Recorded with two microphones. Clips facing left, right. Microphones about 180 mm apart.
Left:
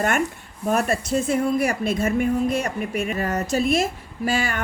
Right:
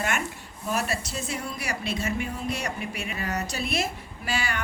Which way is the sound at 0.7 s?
55° left (ahead or behind).